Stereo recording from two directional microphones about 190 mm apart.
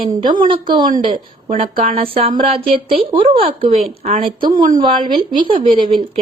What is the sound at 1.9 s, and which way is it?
A woman's voice, 30° right (ahead or behind).